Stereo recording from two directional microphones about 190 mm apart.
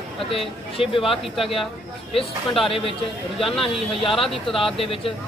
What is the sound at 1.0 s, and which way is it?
Speech, centre (ahead or behind).